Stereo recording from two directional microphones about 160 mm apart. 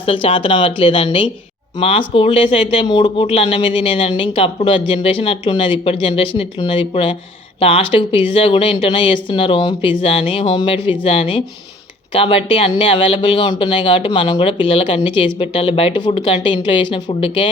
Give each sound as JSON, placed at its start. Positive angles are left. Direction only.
{"t": 0.0, "sound": "speech", "side_deg": 35}